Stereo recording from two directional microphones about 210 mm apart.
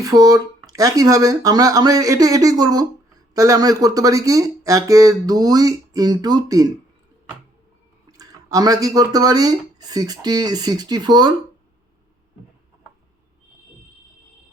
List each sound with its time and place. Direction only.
0.0 s speech: 15° right (ahead or behind)
8.1 s speech: 15° right (ahead or behind)